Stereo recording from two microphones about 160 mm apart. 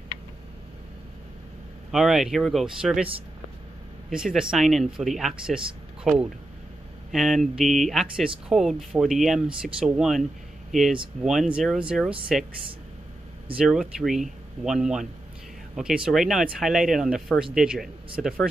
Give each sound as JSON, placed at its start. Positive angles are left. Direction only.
{"t": 1.9, "sound": "speech", "side_deg": 0}
{"t": 4.1, "sound": "speech", "side_deg": -5}
{"t": 13.6, "sound": "speech", "side_deg": -5}